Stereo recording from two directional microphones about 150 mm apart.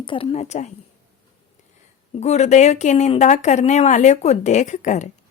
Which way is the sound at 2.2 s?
50° left (ahead or behind).